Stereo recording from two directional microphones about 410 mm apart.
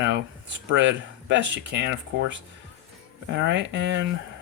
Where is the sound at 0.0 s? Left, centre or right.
Right.